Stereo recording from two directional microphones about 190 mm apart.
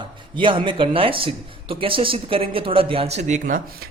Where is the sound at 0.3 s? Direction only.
25° right (ahead or behind).